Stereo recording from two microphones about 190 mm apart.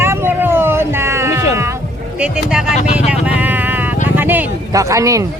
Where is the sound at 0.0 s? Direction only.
15° right (ahead or behind).